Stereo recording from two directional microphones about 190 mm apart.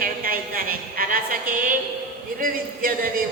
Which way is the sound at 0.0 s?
50° right (ahead or behind).